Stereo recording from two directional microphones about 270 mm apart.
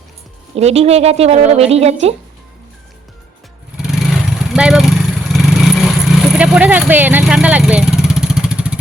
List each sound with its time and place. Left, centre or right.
0.5 s speech: right
3.8 s vehicle: centre